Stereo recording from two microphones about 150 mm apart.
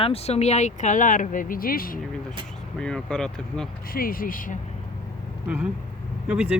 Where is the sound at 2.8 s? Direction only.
5° left (ahead or behind).